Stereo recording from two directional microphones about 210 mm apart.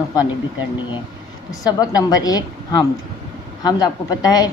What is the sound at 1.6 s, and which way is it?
A woman's voice, 20° left (ahead or behind).